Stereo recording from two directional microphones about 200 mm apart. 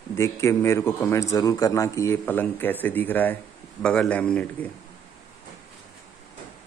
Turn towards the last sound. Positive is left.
turn(degrees=5)  # may be behind; listen again after turning